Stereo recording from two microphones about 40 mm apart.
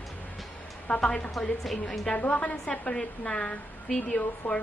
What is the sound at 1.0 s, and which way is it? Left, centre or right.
Speech, left.